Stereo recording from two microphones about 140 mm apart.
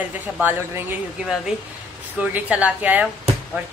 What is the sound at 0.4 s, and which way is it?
Speech, 15° right (ahead or behind).